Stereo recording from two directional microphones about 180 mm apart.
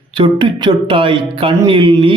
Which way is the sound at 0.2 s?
25° right (ahead or behind).